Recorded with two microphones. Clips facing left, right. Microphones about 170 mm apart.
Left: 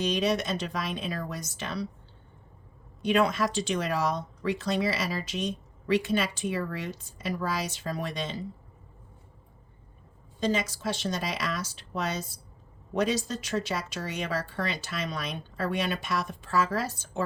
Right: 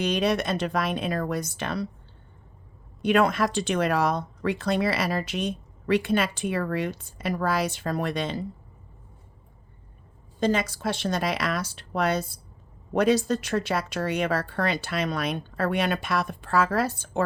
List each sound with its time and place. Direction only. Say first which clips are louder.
0.0 s speech: right 3 dB; 60° right (ahead or behind)
3.0 s speech: right 3 dB; 55° right (ahead or behind)
10.4 s speech: right 4 dB; 55° right (ahead or behind)